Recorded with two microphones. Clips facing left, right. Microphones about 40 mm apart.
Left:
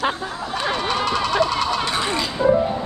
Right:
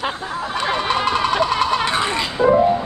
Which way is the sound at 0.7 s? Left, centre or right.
Right.